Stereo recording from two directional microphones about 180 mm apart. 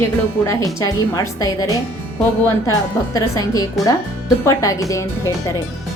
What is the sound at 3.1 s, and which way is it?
A woman's voice, 20° left (ahead or behind).